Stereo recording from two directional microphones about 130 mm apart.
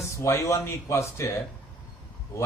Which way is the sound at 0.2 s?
20° left (ahead or behind).